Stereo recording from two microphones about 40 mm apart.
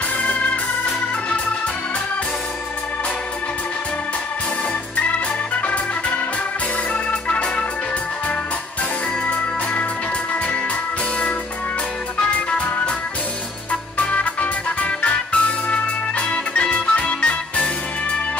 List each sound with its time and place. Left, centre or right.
5.6 s organ: left
9.2 s music: left
13.7 s music: left